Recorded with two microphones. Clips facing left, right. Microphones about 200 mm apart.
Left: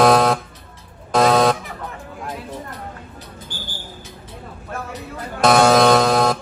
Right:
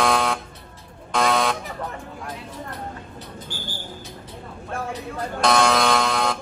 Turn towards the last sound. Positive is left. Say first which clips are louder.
# left 7 dB
turn(degrees=40)  # may be behind; listen again after turning